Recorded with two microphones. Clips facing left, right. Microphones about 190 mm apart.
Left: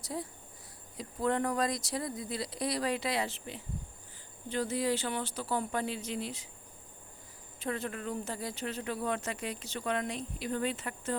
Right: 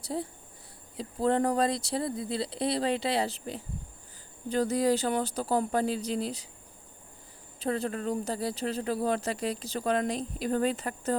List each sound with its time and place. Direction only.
0.0 s speech: 30° right (ahead or behind)
7.6 s speech: 35° right (ahead or behind)